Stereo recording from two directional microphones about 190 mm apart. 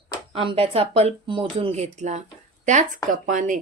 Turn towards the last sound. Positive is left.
turn(degrees=-40)  # may be behind; listen again after turning